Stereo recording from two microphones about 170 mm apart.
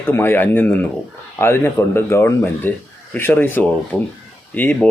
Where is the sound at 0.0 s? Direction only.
15° left (ahead or behind).